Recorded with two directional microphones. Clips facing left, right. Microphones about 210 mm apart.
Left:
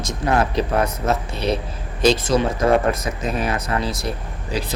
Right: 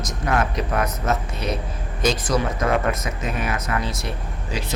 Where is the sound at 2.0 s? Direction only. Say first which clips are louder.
Left 5 dB; 30° left (ahead or behind).